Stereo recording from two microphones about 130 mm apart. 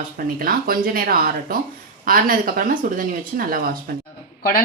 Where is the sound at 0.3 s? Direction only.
90° right.